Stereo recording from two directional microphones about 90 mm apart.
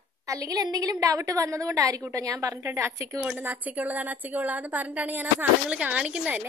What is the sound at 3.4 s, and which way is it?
A woman's voice, 20° right (ahead or behind).